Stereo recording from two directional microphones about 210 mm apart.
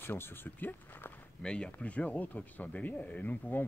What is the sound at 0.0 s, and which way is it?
Speech, 10° left (ahead or behind).